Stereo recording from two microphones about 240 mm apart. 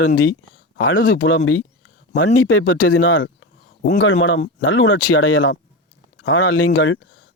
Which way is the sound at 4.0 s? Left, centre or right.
Left.